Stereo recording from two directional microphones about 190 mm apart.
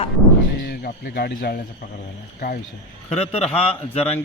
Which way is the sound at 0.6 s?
60° left (ahead or behind).